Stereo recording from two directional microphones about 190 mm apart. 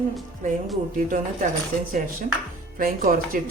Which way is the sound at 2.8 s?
45° right (ahead or behind).